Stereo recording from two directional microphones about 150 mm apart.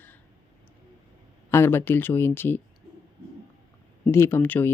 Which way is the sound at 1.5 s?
15° left (ahead or behind).